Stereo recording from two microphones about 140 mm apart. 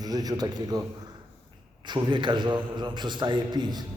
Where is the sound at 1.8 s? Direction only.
35° right (ahead or behind).